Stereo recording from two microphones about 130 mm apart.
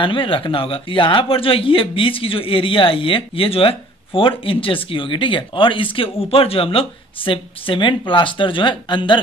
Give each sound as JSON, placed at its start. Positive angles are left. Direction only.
{"t": 0.0, "sound": "speech", "side_deg": 40}